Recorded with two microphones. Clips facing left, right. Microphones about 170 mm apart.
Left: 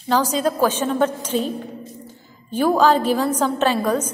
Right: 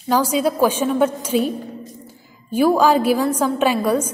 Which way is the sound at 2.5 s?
10° right (ahead or behind).